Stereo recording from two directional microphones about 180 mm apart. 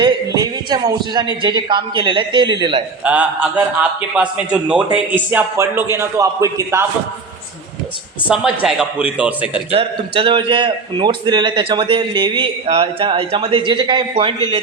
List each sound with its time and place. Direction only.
0.0 s a man's voice: 20° right (ahead or behind)
3.0 s a man's voice: 5° right (ahead or behind)
8.3 s speech: 5° right (ahead or behind)
9.7 s a man's voice: 30° right (ahead or behind)